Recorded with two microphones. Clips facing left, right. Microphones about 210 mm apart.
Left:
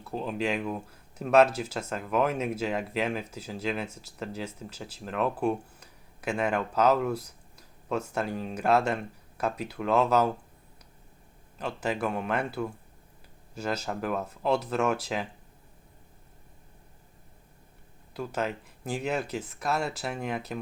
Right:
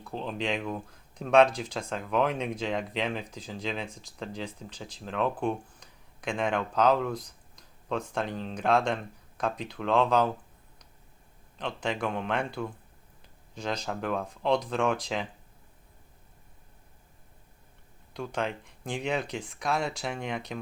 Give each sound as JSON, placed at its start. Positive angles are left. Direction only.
{"t": 0.0, "sound": "speech", "side_deg": 5}
{"t": 11.5, "sound": "speech", "side_deg": 5}
{"t": 18.1, "sound": "speech", "side_deg": 5}